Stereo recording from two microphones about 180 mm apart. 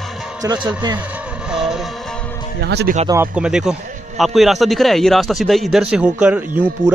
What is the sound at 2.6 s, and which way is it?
Speech, 70° right (ahead or behind).